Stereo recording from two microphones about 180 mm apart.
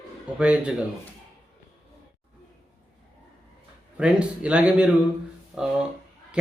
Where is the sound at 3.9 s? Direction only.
5° right (ahead or behind).